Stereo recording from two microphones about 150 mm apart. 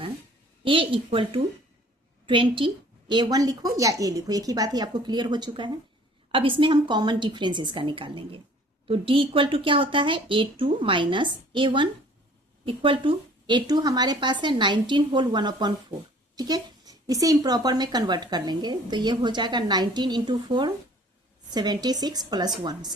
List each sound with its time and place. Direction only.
0.6 s speech: 35° right (ahead or behind)